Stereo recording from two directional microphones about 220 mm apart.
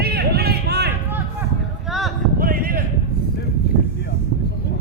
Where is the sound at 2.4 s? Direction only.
40° right (ahead or behind).